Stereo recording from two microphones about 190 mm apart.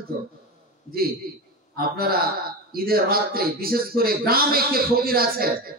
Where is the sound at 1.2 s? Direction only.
50° right (ahead or behind).